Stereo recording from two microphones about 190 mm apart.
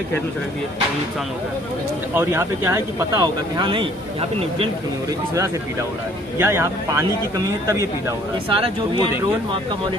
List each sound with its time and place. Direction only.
2.1 s speech: 15° right (ahead or behind); by 4.7 s 30° right (ahead or behind)
6.4 s a man's voice: 15° right (ahead or behind)
8.4 s speech: 30° right (ahead or behind)